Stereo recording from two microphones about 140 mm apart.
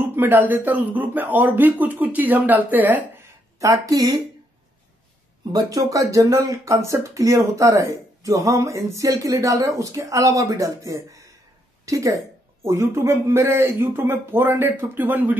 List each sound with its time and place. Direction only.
0.0 s speech: 15° right (ahead or behind)
3.5 s speech: 25° right (ahead or behind)
5.5 s speech: 25° right (ahead or behind)